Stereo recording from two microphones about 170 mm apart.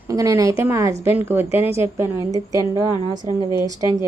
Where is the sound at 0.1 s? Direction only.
20° right (ahead or behind).